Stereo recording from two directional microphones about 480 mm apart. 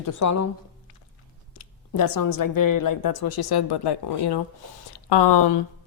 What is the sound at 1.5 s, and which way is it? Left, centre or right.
A woman's voice, left.